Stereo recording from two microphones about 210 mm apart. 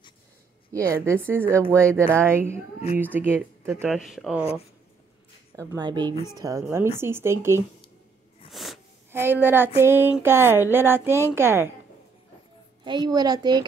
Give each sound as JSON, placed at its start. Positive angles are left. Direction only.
{"t": 0.8, "sound": "speech", "side_deg": -10}
{"t": 5.7, "sound": "a woman's voice", "side_deg": -20}
{"t": 8.5, "sound": "a sound", "side_deg": 0}
{"t": 9.1, "sound": "speech", "side_deg": -10}
{"t": 12.8, "sound": "a woman's voice", "side_deg": -20}